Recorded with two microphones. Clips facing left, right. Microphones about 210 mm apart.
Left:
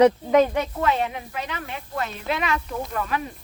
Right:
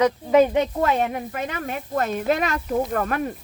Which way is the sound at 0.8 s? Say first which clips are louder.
Right 2 dB; 50° right (ahead or behind).